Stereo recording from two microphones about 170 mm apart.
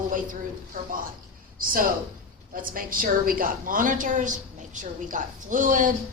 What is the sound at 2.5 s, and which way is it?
A woman's voice, 55° right (ahead or behind).